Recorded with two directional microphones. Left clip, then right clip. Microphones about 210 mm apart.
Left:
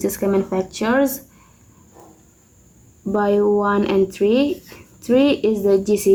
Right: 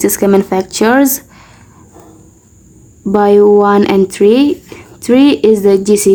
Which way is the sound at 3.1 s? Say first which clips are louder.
Right 10 dB; 45° right (ahead or behind).